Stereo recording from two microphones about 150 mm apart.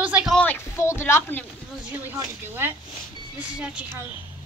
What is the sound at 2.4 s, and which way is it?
Speech, 15° right (ahead or behind).